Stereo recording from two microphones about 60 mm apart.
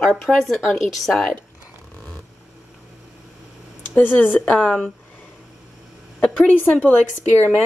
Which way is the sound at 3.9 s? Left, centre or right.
Left.